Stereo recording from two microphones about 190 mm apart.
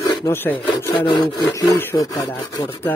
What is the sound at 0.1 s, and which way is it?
Wood, 15° left (ahead or behind).